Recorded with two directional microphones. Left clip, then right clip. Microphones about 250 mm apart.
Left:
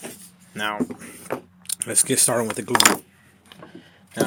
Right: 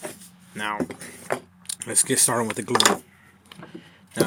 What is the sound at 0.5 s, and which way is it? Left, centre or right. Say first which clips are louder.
Speech: left 2 dB; centre.